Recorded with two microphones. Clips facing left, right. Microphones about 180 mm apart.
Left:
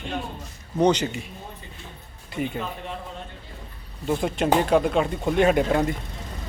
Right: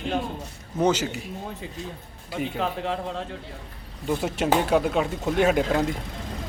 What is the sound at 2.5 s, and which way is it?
Speech, 90° right.